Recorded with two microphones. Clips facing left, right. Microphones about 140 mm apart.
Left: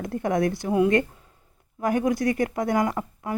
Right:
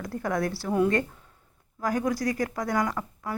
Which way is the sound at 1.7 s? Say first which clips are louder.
Left 4 dB; 20° left (ahead or behind).